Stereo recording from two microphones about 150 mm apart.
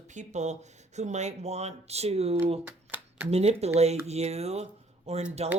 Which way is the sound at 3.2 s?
45° right (ahead or behind).